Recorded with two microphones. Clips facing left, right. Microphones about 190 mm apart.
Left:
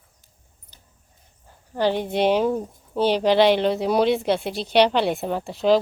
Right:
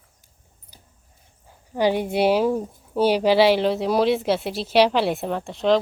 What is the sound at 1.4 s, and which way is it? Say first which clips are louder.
Speech: right 1 dB; 10° right (ahead or behind).